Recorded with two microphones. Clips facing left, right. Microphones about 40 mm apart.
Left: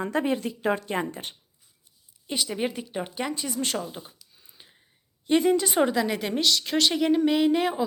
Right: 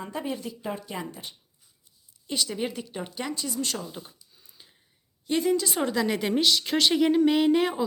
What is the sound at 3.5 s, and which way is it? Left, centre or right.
Speech, left.